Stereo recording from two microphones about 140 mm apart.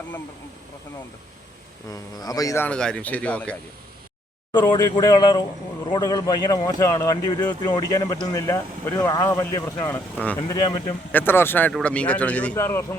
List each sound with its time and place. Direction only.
1.9 s speech: 25° left (ahead or behind)
2.6 s speech: 5° left (ahead or behind)
4.7 s speech: 30° left (ahead or behind); by 10.3 s 15° left (ahead or behind)
10.5 s speech: 25° left (ahead or behind)
11.1 s speech: 15° left (ahead or behind)